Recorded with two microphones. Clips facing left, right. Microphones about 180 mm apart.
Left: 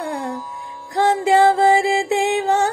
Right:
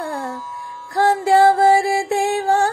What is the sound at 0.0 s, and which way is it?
Music, 20° left (ahead or behind).